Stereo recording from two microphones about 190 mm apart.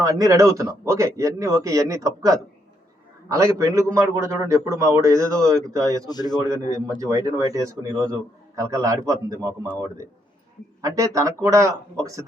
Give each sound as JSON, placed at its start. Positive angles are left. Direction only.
{"t": 0.0, "sound": "a man's voice", "side_deg": -15}
{"t": 6.1, "sound": "a man's voice", "side_deg": 20}
{"t": 6.7, "sound": "a man's voice", "side_deg": -15}
{"t": 10.8, "sound": "a man's voice", "side_deg": -15}